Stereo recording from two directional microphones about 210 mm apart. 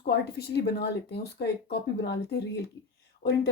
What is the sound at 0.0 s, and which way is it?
Speech, 50° left (ahead or behind).